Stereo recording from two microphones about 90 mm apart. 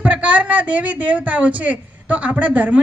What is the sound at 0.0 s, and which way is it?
A woman's voice, 15° right (ahead or behind).